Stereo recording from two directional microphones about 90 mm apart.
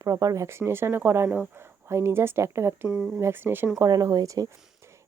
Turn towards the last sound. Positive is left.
turn(degrees=-40)  # may be behind; listen again after turning